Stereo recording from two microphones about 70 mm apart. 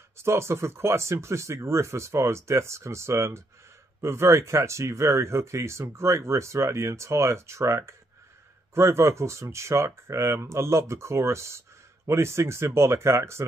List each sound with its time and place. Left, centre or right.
0.2 s speech: right